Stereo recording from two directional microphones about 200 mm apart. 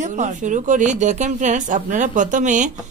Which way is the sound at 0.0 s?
40° right (ahead or behind).